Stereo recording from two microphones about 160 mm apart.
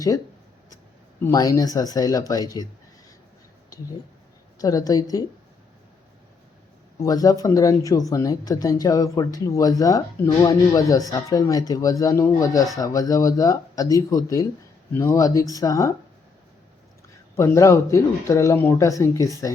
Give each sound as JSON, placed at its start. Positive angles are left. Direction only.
{"t": 1.2, "sound": "speech", "side_deg": 20}
{"t": 3.7, "sound": "a sound", "side_deg": 20}
{"t": 4.5, "sound": "speech", "side_deg": 20}
{"t": 7.0, "sound": "speech", "side_deg": 20}
{"t": 17.3, "sound": "speech", "side_deg": 15}